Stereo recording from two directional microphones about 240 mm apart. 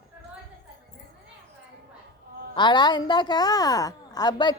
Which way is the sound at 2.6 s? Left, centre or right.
Centre.